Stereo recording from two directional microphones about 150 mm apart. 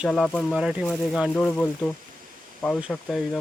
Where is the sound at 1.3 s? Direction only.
10° left (ahead or behind).